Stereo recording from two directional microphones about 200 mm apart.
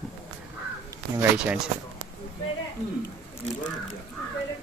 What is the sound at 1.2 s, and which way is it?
Speech, 5° right (ahead or behind).